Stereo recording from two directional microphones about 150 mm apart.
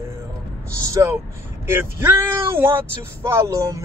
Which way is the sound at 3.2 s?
20° right (ahead or behind).